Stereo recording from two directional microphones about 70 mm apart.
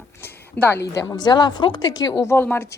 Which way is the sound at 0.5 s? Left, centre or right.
Left.